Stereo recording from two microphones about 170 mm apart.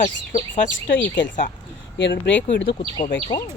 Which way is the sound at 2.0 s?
90° left.